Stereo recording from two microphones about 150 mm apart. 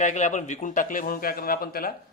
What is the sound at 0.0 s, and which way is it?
A man's voice, 55° left (ahead or behind).